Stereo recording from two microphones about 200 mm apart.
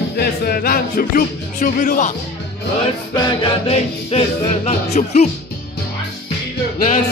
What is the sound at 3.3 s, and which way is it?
Music, 25° left (ahead or behind).